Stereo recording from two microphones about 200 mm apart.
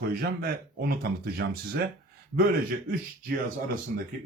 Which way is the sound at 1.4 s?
55° right (ahead or behind).